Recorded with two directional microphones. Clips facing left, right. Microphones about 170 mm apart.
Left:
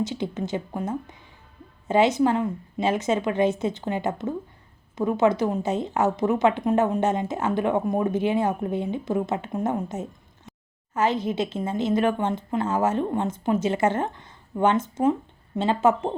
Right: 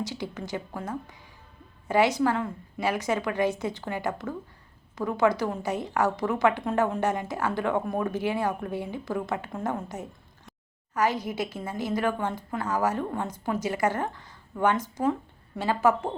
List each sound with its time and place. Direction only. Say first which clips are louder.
0.0 s a woman's voice: left 6 dB; 20° left (ahead or behind)